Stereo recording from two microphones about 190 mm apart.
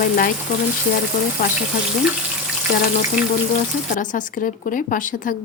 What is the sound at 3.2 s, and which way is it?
Water tap, 5° right (ahead or behind).